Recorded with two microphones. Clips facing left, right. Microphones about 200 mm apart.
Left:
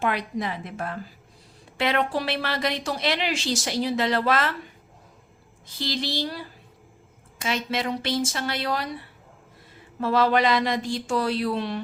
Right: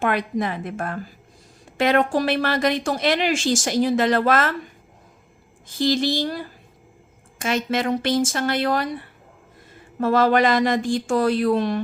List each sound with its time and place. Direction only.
0.0 s a woman's voice: 50° right (ahead or behind)
5.6 s a woman's voice: 45° right (ahead or behind)